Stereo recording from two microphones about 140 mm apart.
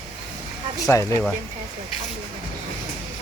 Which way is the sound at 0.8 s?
20° left (ahead or behind).